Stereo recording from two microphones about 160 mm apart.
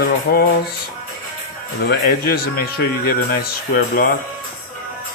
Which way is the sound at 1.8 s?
70° left (ahead or behind).